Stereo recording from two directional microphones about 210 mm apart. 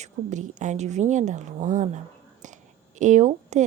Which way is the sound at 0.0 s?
35° right (ahead or behind).